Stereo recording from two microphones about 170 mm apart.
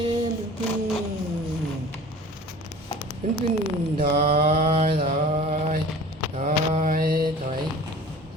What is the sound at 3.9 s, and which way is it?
Mantra, 35° right (ahead or behind).